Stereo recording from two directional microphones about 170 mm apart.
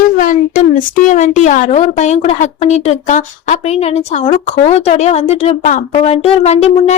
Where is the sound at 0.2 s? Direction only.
50° left (ahead or behind).